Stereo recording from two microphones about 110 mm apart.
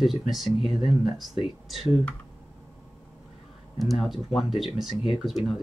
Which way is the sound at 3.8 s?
Centre (ahead or behind).